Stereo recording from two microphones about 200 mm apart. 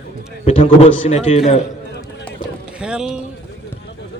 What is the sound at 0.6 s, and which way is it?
Speech, 30° left (ahead or behind).